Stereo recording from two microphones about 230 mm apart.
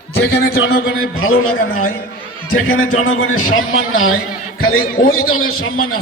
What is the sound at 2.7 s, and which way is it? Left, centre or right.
A man's voice, left.